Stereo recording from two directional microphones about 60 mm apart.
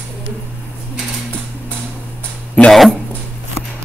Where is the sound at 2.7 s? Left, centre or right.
Centre.